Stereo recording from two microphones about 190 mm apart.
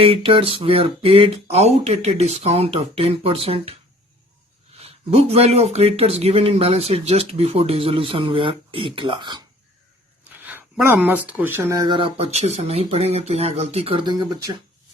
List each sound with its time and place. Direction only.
0.0 s speech: 30° right (ahead or behind)
4.8 s speech: 30° right (ahead or behind)
10.3 s speech: 10° right (ahead or behind)